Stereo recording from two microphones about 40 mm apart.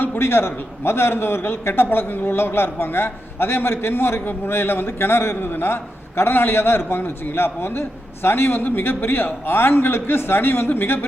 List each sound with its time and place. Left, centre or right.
0.2 s a man's voice: left
4.3 s a man's voice: left
8.6 s a man's voice: left